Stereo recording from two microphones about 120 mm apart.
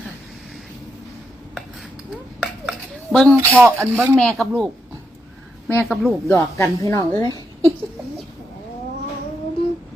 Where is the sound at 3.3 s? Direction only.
20° right (ahead or behind).